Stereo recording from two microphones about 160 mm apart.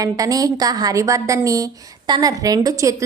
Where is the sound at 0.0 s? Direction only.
20° right (ahead or behind).